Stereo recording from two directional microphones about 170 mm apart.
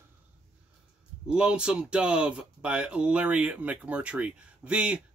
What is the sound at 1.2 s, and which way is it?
Speech, 5° right (ahead or behind).